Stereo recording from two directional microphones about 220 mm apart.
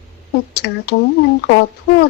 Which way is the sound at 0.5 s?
45° left (ahead or behind).